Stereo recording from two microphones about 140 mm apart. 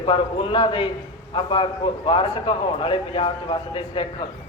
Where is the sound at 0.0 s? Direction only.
40° left (ahead or behind).